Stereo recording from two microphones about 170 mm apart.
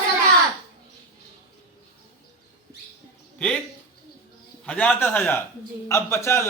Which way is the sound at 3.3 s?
5° left (ahead or behind).